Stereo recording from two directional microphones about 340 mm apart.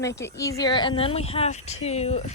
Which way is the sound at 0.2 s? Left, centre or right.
Centre.